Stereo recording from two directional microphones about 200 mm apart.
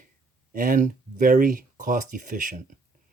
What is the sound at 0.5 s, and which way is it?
Speech, 45° right (ahead or behind).